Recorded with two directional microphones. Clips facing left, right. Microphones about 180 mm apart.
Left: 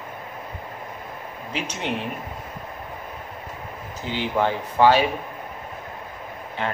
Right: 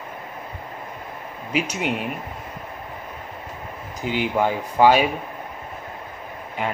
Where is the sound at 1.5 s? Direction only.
10° right (ahead or behind).